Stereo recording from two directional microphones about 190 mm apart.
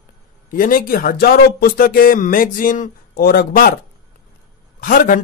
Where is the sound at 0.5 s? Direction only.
45° left (ahead or behind).